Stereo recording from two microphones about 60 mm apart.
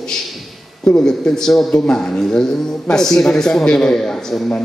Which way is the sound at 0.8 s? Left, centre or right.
Centre.